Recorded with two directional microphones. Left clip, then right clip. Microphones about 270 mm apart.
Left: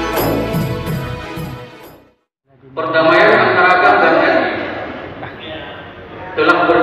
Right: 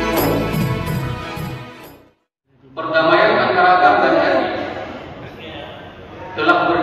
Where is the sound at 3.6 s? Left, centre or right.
Centre.